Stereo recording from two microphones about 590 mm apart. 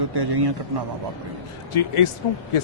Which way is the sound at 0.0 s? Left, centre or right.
Right.